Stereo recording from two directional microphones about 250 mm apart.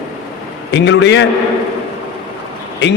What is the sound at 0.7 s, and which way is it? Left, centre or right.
Speech, left.